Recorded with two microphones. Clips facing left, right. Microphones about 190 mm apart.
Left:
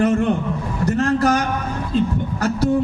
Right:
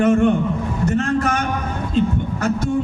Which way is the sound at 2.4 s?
35° left (ahead or behind).